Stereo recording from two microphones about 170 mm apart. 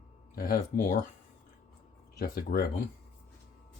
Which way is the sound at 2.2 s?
60° left (ahead or behind).